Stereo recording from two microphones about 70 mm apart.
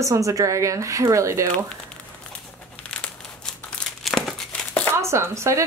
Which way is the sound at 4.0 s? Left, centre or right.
Centre.